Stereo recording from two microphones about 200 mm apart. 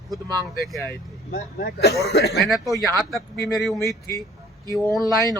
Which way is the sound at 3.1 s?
Centre (ahead or behind).